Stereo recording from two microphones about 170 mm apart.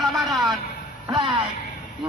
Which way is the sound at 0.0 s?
Centre (ahead or behind).